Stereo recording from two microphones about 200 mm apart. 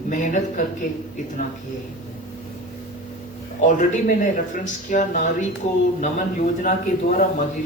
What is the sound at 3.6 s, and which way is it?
Speech, 40° left (ahead or behind).